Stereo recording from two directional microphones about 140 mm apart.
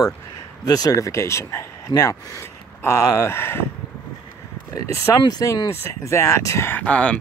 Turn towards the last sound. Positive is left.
turn(degrees=10)  # may be behind; listen again after turning